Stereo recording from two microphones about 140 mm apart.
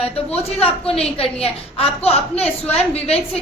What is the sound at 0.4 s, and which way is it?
A woman's voice, 45° left (ahead or behind).